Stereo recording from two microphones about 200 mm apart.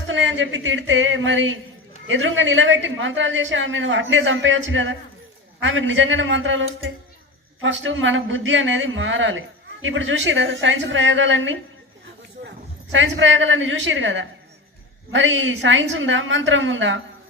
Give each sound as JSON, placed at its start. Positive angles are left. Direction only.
{"t": 0.1, "sound": "a woman's voice", "side_deg": -70}
{"t": 12.9, "sound": "a woman's voice", "side_deg": -70}